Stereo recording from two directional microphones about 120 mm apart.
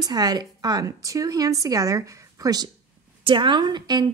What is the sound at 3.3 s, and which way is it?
Speech, 45° right (ahead or behind).